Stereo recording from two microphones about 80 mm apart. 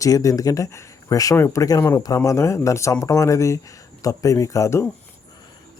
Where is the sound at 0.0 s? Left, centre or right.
Left.